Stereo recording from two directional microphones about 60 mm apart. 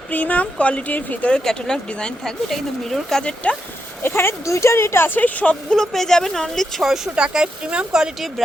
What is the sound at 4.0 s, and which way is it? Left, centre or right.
Speech, left.